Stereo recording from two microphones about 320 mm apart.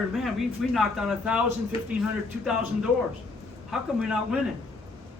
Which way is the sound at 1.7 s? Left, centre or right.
Centre.